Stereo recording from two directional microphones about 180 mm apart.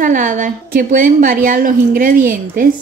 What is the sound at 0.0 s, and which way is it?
A woman's voice, 45° right (ahead or behind).